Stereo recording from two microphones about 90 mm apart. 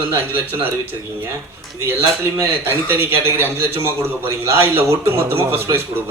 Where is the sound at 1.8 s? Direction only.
30° right (ahead or behind).